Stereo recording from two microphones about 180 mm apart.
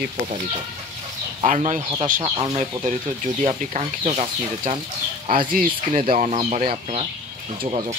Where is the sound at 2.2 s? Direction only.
35° right (ahead or behind).